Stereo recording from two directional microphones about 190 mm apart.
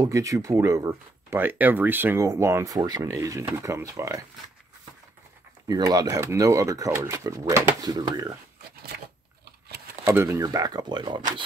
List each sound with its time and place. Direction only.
0.0 s speech: 15° right (ahead or behind)
5.7 s speech: 20° right (ahead or behind)
10.0 s speech: 10° right (ahead or behind)